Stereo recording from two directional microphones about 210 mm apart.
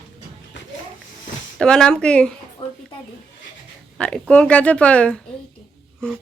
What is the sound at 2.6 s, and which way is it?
Speech, 25° left (ahead or behind).